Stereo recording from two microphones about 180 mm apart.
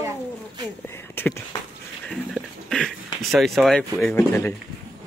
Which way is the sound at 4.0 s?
5° left (ahead or behind).